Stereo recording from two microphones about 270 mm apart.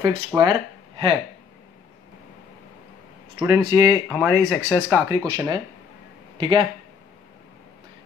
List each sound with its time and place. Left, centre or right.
0.0 s speech: centre
3.3 s speech: centre